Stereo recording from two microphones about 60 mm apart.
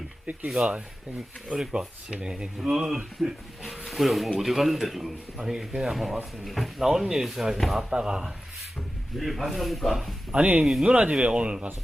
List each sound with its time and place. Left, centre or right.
0.5 s speech: centre
7.9 s speech: centre
9.1 s speech: centre
10.3 s speech: right
10.6 s speech: centre
10.8 s speech: centre